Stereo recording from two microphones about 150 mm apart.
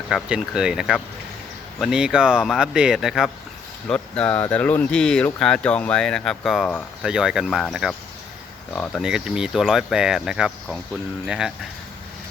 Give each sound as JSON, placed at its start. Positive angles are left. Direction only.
{"t": 0.1, "sound": "speech", "side_deg": -5}
{"t": 8.7, "sound": "speech", "side_deg": 10}
{"t": 9.0, "sound": "speech", "side_deg": -5}